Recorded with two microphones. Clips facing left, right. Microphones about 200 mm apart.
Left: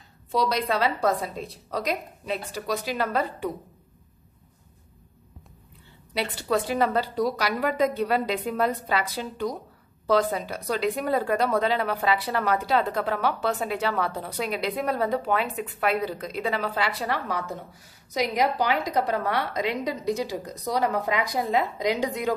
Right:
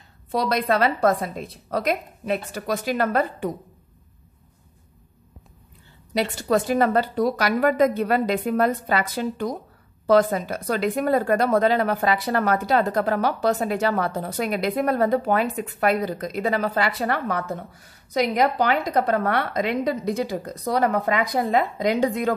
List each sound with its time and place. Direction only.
0.3 s a woman's voice: 55° right (ahead or behind)
6.1 s a woman's voice: 45° right (ahead or behind)